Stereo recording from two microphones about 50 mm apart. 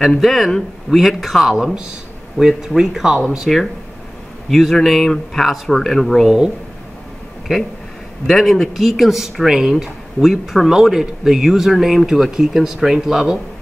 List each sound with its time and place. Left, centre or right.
0.2 s speech: centre
1.5 s speech: centre
3.5 s speech: centre
6.2 s speech: centre
8.3 s speech: centre